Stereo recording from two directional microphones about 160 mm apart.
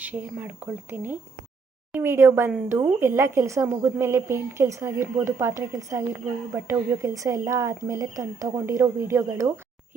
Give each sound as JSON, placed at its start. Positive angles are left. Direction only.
{"t": 0.0, "sound": "a woman's voice", "side_deg": -10}